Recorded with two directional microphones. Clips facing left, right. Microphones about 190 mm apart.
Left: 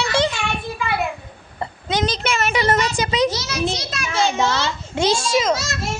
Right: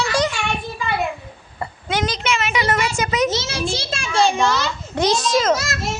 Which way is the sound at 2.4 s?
40° left (ahead or behind).